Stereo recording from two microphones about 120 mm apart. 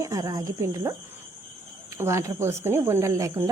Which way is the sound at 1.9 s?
20° right (ahead or behind).